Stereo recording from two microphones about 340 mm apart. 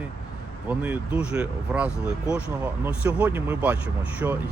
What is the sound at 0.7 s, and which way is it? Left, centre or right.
Speech, centre.